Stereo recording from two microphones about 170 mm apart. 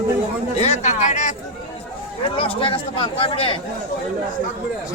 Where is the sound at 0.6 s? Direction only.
40° left (ahead or behind).